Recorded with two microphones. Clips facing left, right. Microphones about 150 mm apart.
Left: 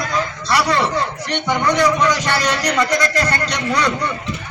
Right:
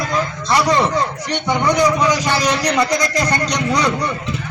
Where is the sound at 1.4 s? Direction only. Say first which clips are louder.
Right 1 dB; 10° right (ahead or behind).